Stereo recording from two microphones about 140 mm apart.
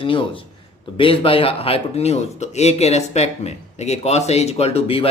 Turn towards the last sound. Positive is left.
turn(degrees=45)  # may be behind; listen again after turning